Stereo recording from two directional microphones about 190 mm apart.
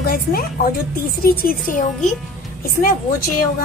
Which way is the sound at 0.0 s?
50° left (ahead or behind).